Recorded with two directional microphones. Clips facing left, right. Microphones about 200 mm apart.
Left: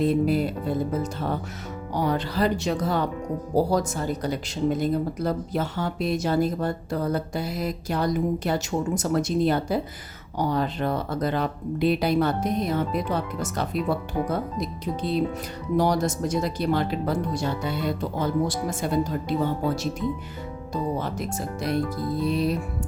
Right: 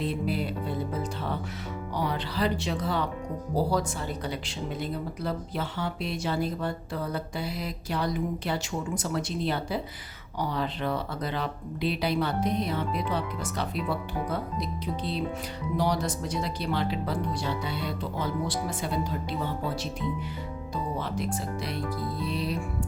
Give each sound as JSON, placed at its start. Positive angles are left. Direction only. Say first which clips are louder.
{"t": 0.0, "sound": "speech", "louder": "left 8 dB", "side_deg": 45}
{"t": 1.9, "sound": "speech", "louder": "left 6 dB", "side_deg": 45}
{"t": 21.0, "sound": "speech", "louder": "left 2 dB", "side_deg": 45}